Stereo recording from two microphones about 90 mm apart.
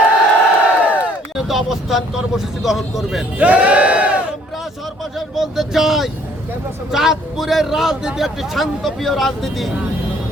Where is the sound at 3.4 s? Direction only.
15° right (ahead or behind).